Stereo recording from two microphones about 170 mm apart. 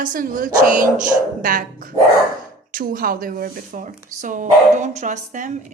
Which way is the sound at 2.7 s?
55° right (ahead or behind).